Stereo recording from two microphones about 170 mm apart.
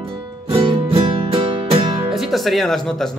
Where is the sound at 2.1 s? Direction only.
Centre (ahead or behind).